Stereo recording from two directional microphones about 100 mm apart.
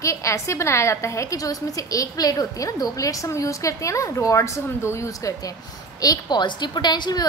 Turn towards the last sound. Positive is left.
turn(degrees=45)  # may be behind; listen again after turning